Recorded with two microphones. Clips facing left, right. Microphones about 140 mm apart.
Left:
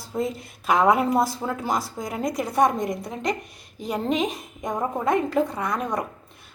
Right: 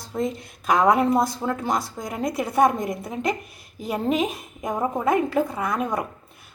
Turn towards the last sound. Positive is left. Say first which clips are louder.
# right 1 dB
turn(degrees=0)  # may be behind; listen again after turning